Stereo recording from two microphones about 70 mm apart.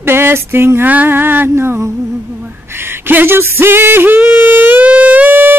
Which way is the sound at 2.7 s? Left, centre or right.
Right.